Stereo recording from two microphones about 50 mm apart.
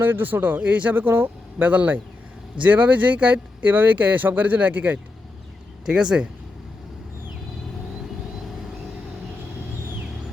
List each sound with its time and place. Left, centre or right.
0.0 s speech: right
5.8 s speech: centre